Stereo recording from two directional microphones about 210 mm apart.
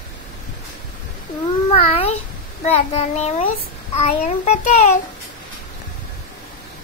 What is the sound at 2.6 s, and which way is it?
A child's voice, 30° left (ahead or behind).